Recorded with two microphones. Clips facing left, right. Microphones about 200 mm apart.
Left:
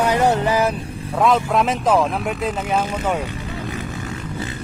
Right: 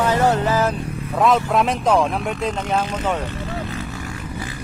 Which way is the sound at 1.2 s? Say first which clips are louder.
Even; centre (ahead or behind).